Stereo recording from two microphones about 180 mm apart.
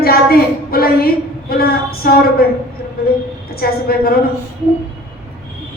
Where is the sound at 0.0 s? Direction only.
55° left (ahead or behind).